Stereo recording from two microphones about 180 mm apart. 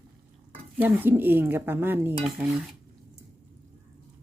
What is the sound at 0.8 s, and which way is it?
A woman's voice, 10° right (ahead or behind).